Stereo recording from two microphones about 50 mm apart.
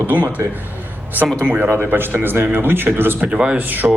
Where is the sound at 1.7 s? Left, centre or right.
Right.